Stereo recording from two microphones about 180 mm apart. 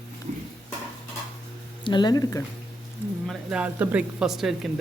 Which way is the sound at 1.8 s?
25° left (ahead or behind).